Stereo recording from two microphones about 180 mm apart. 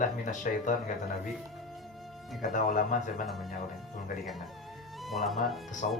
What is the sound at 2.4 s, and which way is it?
Speech, 45° left (ahead or behind).